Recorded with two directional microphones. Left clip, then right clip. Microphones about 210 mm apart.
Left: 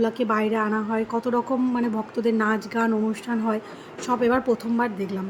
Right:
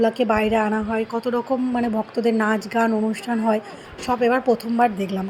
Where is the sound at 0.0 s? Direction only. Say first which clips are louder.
Right 4 dB; 10° right (ahead or behind).